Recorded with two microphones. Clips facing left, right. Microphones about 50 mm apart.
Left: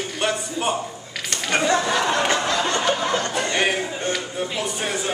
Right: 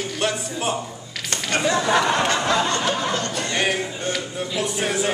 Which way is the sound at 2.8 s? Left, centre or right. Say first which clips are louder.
Left 1 dB; centre.